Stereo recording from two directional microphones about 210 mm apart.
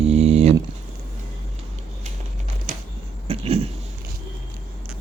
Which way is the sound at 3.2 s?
30° right (ahead or behind).